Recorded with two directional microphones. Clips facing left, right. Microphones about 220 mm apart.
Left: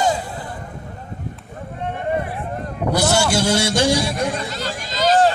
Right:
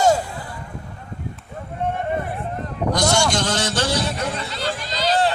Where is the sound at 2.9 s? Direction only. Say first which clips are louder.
Left 2 dB; 5° left (ahead or behind).